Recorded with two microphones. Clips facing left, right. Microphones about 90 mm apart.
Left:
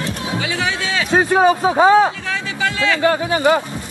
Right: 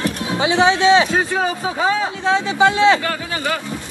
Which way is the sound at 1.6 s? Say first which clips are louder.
Left 8 dB; 35° left (ahead or behind).